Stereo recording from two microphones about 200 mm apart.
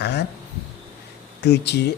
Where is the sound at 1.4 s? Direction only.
55° left (ahead or behind).